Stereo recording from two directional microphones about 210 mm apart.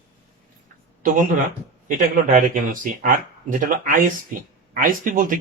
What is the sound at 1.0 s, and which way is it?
Speech, 40° right (ahead or behind).